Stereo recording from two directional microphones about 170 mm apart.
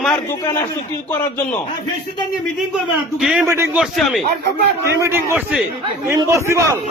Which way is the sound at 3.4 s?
15° right (ahead or behind).